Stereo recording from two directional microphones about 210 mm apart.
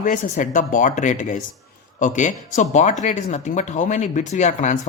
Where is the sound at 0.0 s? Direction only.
35° left (ahead or behind).